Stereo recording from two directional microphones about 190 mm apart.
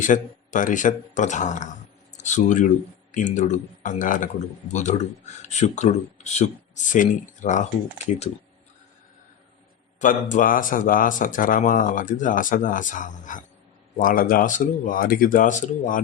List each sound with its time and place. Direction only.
0.0 s speech: 40° left (ahead or behind)
10.0 s speech: 40° left (ahead or behind)